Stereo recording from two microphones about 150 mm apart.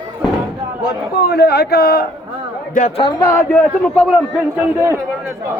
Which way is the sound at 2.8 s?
65° left (ahead or behind).